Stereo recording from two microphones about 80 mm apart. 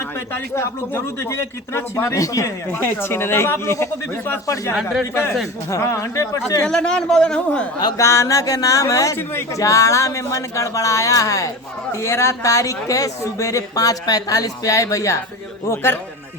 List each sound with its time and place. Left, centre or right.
0.3 s speech: left
2.1 s speech: left
2.7 s speech: left
4.7 s speech: centre
5.7 s speech: left
6.7 s a man's voice: centre
7.9 s speech: left
15.7 s speech: left